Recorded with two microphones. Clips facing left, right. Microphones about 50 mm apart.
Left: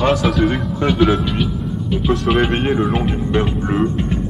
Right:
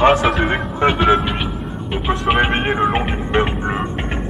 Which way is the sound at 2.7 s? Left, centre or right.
Right.